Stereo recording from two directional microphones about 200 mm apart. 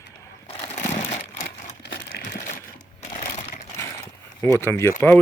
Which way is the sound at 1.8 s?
55° left (ahead or behind).